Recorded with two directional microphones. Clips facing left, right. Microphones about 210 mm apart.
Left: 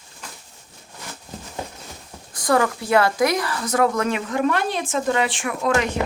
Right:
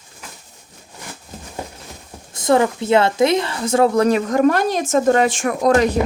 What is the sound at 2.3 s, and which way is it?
A woman's voice, 25° right (ahead or behind).